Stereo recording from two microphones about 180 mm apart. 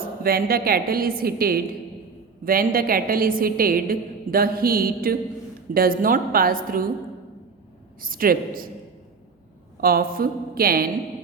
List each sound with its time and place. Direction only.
0.0 s a woman's voice: 55° right (ahead or behind)
8.0 s a woman's voice: 50° right (ahead or behind)
9.8 s a woman's voice: 55° right (ahead or behind)